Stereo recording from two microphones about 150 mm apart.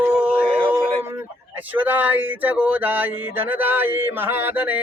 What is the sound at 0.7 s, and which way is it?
Speech, 15° right (ahead or behind).